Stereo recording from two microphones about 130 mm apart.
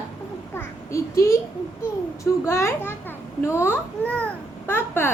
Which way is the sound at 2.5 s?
20° left (ahead or behind).